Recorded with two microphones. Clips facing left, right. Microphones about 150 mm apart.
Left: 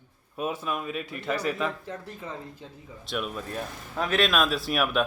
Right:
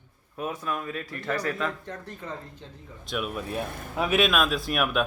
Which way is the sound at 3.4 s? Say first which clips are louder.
Right 3 dB; 60° right (ahead or behind).